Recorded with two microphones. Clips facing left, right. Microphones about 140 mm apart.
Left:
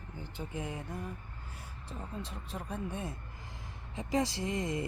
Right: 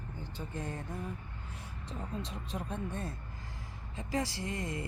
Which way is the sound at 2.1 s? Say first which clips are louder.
Right 3 dB; centre (ahead or behind).